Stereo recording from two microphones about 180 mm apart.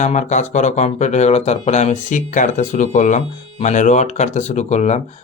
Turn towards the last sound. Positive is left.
turn(degrees=40)  # may be behind; listen again after turning